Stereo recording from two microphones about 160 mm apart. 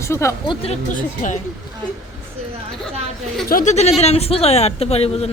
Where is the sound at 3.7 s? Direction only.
45° left (ahead or behind).